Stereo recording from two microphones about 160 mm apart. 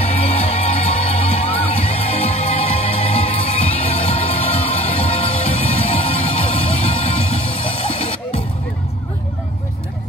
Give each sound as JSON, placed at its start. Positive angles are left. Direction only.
{"t": 0.0, "sound": "music", "side_deg": 40}